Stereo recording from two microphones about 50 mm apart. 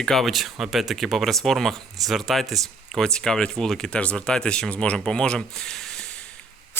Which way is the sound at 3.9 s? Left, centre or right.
Left.